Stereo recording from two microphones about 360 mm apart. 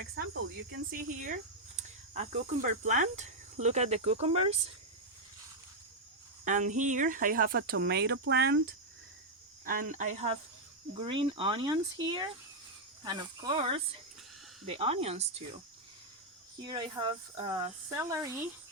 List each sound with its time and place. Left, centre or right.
0.9 s speech: right
6.4 s speech: right
16.6 s speech: centre